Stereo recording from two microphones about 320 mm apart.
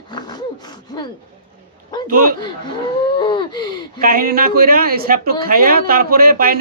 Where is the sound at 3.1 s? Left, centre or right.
Centre.